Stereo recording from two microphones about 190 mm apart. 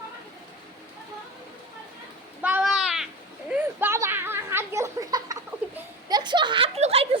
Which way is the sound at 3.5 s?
10° right (ahead or behind).